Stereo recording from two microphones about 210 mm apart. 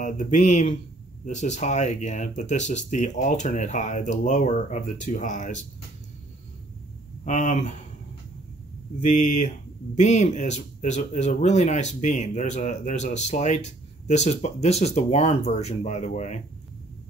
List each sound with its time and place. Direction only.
0.0 s speech: 35° left (ahead or behind)
7.2 s speech: 35° left (ahead or behind)
9.2 s speech: 35° left (ahead or behind)